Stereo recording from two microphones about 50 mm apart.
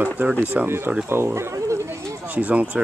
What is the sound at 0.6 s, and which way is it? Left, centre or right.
Speech, right.